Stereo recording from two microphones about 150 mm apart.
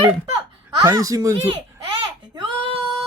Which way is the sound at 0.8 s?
20° right (ahead or behind).